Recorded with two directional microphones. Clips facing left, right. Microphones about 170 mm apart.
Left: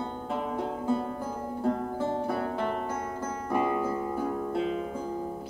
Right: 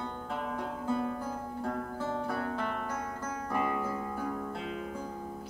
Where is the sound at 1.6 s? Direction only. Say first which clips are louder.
Left 7 dB; 25° left (ahead or behind).